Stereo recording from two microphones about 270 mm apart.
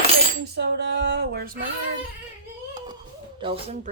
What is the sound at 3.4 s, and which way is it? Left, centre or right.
Speech, right.